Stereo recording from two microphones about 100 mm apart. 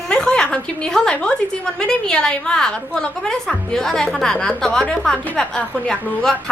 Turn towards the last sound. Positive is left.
turn(degrees=5)  # may be behind; listen again after turning